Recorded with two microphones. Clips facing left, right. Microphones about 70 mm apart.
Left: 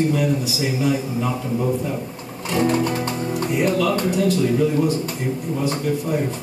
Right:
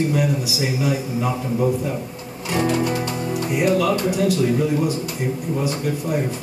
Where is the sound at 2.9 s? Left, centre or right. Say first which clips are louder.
Even; left.